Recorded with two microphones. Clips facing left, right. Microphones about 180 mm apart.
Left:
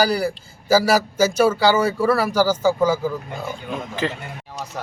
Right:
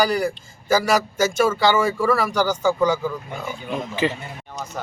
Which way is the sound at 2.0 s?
5° left (ahead or behind).